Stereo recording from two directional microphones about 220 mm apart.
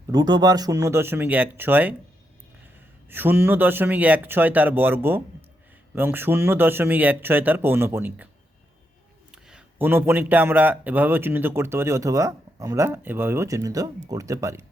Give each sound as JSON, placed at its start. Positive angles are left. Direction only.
{"t": 0.1, "sound": "speech", "side_deg": -20}
{"t": 3.1, "sound": "speech", "side_deg": -10}
{"t": 9.3, "sound": "speech", "side_deg": -5}